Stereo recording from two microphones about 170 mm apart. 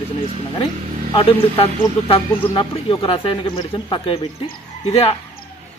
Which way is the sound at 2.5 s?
30° left (ahead or behind).